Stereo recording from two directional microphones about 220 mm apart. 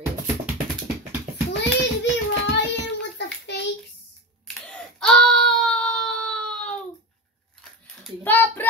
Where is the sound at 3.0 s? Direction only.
50° left (ahead or behind).